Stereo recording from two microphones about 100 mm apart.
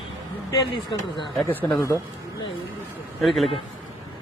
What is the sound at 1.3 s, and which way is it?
Speech, 15° left (ahead or behind).